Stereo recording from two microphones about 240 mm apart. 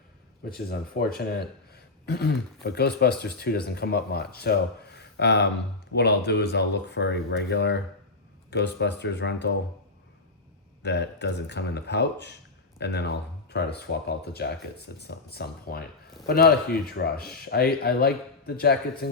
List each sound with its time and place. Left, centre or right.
0.5 s speech: left
10.8 s speech: left